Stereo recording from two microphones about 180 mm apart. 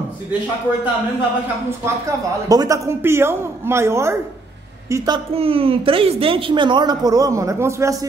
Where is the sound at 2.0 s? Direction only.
20° right (ahead or behind).